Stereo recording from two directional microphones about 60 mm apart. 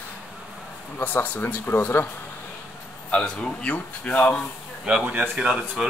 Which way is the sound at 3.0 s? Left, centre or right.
Centre.